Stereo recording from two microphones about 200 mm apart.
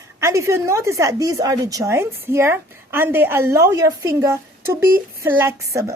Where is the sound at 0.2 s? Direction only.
15° right (ahead or behind).